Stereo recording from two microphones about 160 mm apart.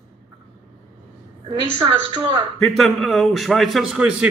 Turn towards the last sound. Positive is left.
turn(degrees=-5)  # may be behind; listen again after turning